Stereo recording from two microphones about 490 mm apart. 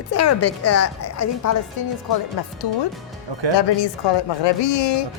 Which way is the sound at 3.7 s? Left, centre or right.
Left.